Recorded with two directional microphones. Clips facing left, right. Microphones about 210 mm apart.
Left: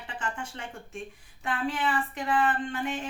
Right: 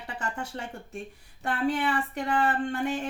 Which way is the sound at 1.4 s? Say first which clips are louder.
Right 3 dB; 40° right (ahead or behind).